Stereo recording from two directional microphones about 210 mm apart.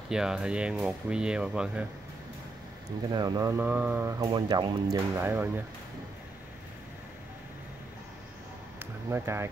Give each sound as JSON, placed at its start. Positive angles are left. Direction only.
{"t": 0.1, "sound": "speech", "side_deg": -5}
{"t": 3.1, "sound": "speech", "side_deg": -20}
{"t": 4.9, "sound": "speech", "side_deg": -10}
{"t": 9.1, "sound": "speech", "side_deg": -10}